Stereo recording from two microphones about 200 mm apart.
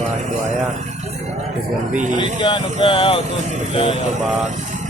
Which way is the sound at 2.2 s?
25° left (ahead or behind).